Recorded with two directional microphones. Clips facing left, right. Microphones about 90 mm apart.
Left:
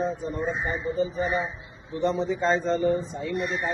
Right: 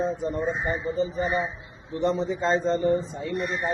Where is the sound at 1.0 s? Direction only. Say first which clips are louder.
Left 1 dB; 35° right (ahead or behind).